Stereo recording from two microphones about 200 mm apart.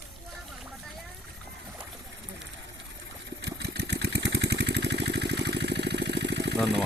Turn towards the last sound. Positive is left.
turn(degrees=-60)  # may be behind; listen again after turning